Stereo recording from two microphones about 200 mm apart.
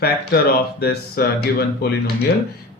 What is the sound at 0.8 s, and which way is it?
Mantra, 50° left (ahead or behind).